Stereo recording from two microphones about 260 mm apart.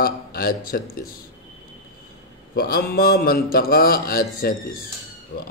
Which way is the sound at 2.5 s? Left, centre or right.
Left.